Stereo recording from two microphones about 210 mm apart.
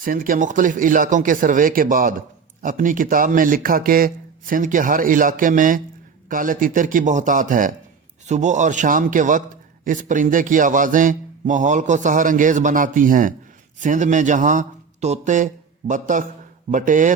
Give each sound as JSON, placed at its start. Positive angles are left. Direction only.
{"t": 0.0, "sound": "speech", "side_deg": -40}